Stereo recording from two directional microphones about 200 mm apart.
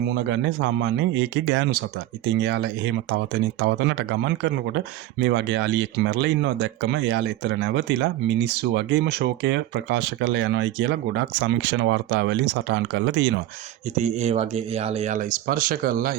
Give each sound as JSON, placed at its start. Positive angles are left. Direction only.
{"t": 0.1, "sound": "speech", "side_deg": -65}
{"t": 13.9, "sound": "speech", "side_deg": -35}